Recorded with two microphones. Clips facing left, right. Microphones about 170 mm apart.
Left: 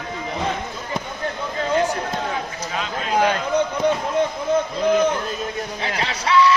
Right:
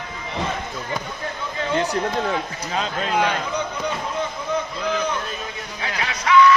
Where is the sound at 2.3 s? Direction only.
35° right (ahead or behind).